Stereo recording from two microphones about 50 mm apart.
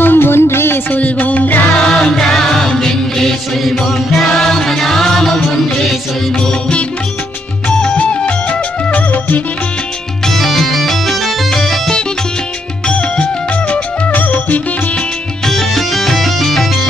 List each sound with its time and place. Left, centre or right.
0.0 s music: left
0.8 s music: left
1.8 s music: centre
7.6 s music: left
10.2 s music: centre
12.8 s music: left
15.4 s music: centre